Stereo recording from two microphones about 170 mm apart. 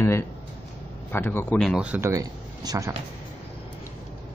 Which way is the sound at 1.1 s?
10° left (ahead or behind).